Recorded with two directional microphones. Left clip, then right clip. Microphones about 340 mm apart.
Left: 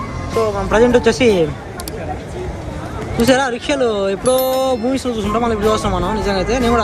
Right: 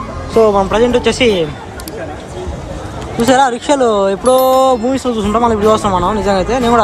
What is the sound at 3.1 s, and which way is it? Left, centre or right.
Speech, centre.